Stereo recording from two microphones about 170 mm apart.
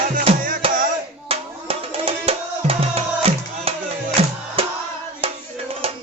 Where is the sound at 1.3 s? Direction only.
35° right (ahead or behind).